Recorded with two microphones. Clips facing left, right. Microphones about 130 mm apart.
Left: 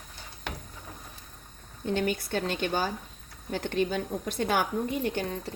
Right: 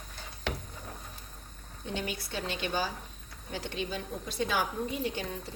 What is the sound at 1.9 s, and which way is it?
A woman's voice, 50° left (ahead or behind).